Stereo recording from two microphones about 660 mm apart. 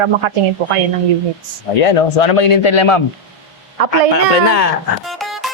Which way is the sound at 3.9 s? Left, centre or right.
Left.